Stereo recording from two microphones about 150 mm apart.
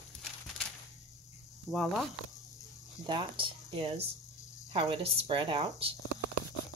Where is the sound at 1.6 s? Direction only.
Centre (ahead or behind).